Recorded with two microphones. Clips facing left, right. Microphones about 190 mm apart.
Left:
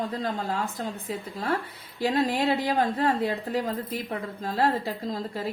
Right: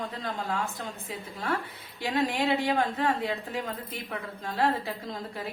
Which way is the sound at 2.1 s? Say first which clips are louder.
Left 1 dB; 40° left (ahead or behind).